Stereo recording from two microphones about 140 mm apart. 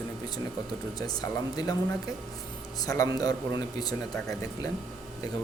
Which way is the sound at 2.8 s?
25° left (ahead or behind).